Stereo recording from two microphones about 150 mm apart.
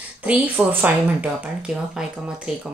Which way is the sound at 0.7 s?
10° right (ahead or behind).